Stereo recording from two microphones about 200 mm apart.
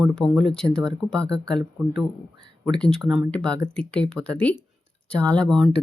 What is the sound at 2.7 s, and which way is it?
Speech, 5° left (ahead or behind).